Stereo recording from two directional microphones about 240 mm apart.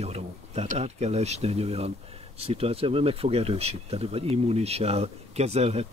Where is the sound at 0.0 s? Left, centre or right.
Right.